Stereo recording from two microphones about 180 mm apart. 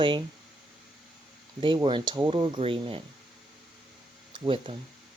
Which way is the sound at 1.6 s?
25° right (ahead or behind).